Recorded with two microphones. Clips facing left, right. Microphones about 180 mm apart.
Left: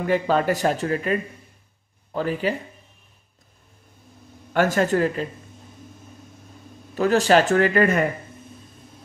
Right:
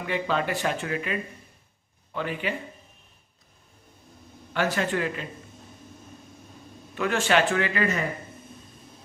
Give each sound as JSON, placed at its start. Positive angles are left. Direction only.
{"t": 0.0, "sound": "speech", "side_deg": 45}
{"t": 4.6, "sound": "speech", "side_deg": 45}
{"t": 7.0, "sound": "speech", "side_deg": 35}